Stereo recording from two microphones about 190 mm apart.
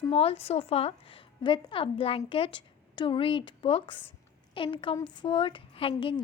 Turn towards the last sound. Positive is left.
turn(degrees=30)  # may be behind; listen again after turning